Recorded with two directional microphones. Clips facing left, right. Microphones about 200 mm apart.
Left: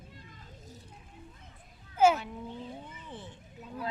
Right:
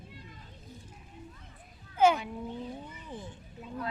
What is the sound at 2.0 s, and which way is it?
Speech, 5° left (ahead or behind).